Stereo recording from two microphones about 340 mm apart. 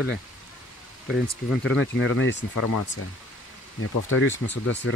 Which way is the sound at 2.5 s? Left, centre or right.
Left.